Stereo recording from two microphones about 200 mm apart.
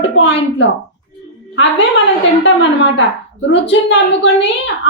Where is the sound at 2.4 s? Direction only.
65° left (ahead or behind).